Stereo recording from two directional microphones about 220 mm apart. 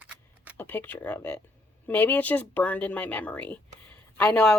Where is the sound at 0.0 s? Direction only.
5° right (ahead or behind).